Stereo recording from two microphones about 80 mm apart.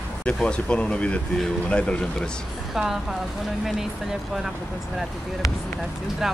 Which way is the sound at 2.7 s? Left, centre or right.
Centre.